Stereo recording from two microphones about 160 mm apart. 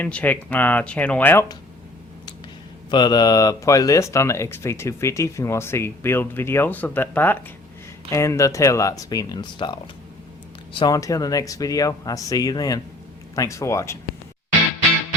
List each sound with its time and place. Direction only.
0.0 s speech: 10° left (ahead or behind)
2.9 s speech: 25° left (ahead or behind)
10.8 s speech: 25° left (ahead or behind)